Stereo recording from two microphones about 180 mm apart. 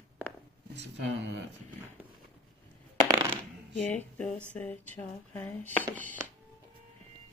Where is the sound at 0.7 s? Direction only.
75° right (ahead or behind).